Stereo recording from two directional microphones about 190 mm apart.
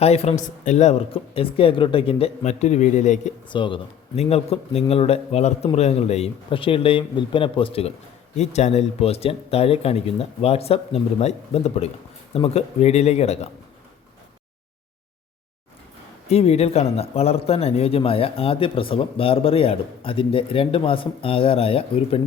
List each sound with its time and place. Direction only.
0.0 s speech: 35° left (ahead or behind)
3.5 s speech: 25° left (ahead or behind)
16.3 s speech: 30° left (ahead or behind)